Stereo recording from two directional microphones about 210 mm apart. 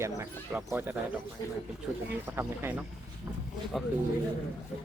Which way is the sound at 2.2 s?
10° right (ahead or behind).